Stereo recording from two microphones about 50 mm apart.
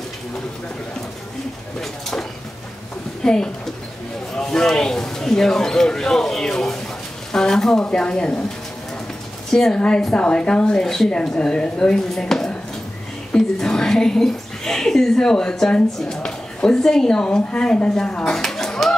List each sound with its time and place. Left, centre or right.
1.8 s speech: centre
3.2 s speech: centre
9.5 s a woman's voice: centre